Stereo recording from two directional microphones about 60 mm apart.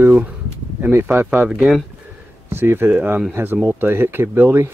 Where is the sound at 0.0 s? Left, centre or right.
Right.